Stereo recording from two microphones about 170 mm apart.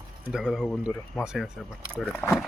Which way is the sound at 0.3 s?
5° right (ahead or behind).